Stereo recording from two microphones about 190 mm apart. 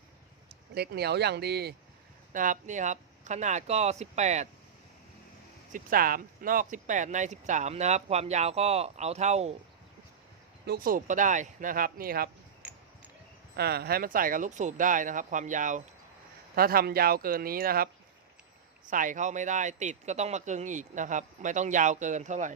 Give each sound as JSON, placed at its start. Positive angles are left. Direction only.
{"t": 0.7, "sound": "speech", "side_deg": -55}
{"t": 2.3, "sound": "speech", "side_deg": -45}
{"t": 5.7, "sound": "speech", "side_deg": -50}
{"t": 10.7, "sound": "speech", "side_deg": -50}
{"t": 13.6, "sound": "speech", "side_deg": -55}
{"t": 18.9, "sound": "speech", "side_deg": -45}